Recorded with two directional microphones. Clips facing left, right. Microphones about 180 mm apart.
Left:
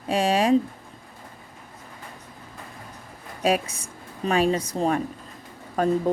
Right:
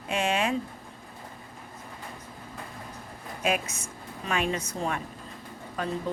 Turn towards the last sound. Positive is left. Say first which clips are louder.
# left 9 dB
turn(degrees=45)  # may be behind; listen again after turning